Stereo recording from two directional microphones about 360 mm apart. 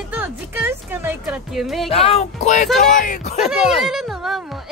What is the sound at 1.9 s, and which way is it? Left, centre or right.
Speech, centre.